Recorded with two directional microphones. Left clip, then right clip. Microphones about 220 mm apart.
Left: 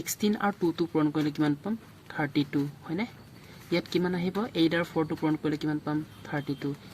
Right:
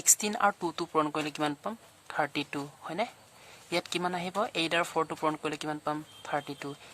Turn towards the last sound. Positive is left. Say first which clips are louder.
# even
turn(degrees=-50)  # may be behind; listen again after turning